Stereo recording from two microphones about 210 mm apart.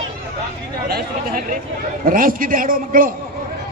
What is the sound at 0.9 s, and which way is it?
A man's voice, 45° right (ahead or behind).